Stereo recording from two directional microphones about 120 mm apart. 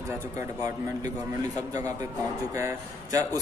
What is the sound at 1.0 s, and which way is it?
A man's voice, 30° right (ahead or behind).